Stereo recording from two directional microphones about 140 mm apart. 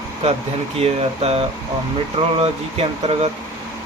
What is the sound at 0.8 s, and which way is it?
Speech, 45° right (ahead or behind).